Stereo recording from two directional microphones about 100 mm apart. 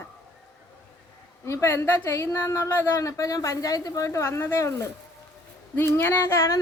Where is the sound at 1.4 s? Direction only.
30° left (ahead or behind).